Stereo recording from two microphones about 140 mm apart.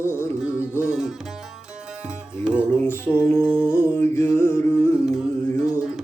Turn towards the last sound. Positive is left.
turn(degrees=-5)  # may be behind; listen again after turning